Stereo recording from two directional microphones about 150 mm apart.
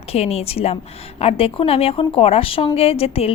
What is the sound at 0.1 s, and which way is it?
A woman's voice, 45° left (ahead or behind).